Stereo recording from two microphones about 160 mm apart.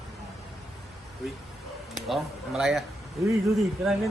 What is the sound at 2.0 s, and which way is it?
Speech, centre (ahead or behind).